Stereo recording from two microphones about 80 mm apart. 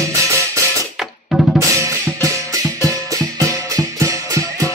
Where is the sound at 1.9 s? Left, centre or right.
Right.